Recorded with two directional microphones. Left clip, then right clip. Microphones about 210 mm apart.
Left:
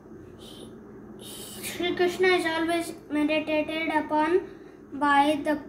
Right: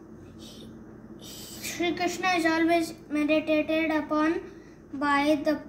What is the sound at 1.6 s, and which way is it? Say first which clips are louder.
A woman's voice: left 2 dB; 15° left (ahead or behind).